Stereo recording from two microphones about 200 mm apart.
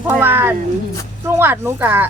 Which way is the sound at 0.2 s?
10° right (ahead or behind).